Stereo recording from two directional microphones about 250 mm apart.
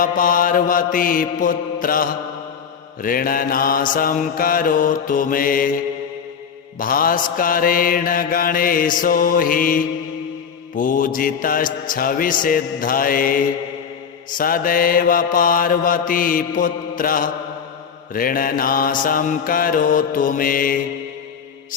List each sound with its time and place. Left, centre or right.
0.0 s mantra: left